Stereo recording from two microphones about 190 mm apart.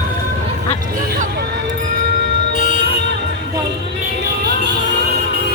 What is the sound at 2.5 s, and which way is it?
Music, 40° left (ahead or behind).